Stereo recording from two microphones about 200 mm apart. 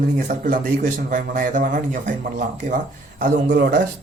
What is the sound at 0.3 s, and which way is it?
A man's voice, 45° right (ahead or behind).